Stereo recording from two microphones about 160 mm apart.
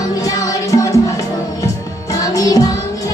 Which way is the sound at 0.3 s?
20° left (ahead or behind).